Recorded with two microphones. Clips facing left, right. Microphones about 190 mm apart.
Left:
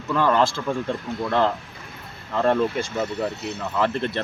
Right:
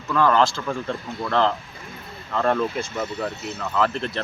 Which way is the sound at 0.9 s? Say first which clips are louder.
Left 2 dB; 15° left (ahead or behind).